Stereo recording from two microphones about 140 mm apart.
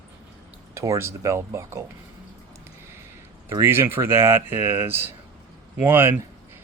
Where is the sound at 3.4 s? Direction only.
20° right (ahead or behind).